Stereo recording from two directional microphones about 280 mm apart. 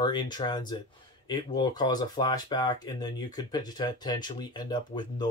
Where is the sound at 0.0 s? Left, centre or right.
Centre.